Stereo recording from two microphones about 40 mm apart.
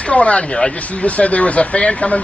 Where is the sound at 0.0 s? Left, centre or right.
Left.